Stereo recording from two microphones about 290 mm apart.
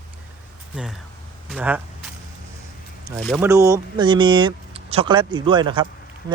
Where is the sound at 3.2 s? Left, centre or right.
Centre.